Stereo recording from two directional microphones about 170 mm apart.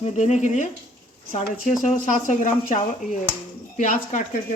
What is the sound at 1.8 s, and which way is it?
Speech, 50° left (ahead or behind).